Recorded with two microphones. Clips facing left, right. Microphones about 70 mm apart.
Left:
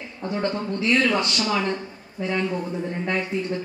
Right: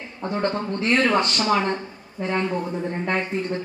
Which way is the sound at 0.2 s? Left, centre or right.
Right.